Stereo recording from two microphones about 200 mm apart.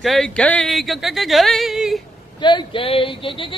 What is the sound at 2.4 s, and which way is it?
Speech, 25° left (ahead or behind).